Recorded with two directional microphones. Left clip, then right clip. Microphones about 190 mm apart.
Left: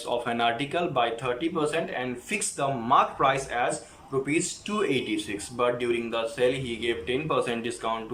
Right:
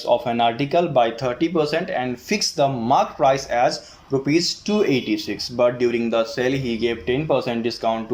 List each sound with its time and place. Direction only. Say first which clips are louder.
0.1 s speech: right 7 dB; 25° right (ahead or behind)
4.8 s speech: right 5 dB; 25° right (ahead or behind)